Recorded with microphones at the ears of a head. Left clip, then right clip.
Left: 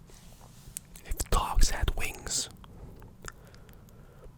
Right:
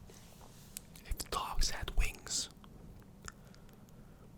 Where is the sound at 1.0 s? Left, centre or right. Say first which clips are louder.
Left 7 dB; left.